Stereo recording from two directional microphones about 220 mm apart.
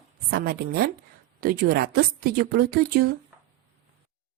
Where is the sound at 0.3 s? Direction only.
45° right (ahead or behind).